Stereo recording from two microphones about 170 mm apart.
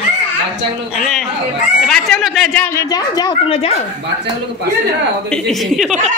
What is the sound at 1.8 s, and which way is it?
Speech, centre (ahead or behind).